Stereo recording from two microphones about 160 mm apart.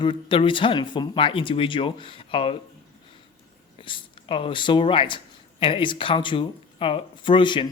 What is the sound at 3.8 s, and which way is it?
Speech, 30° left (ahead or behind).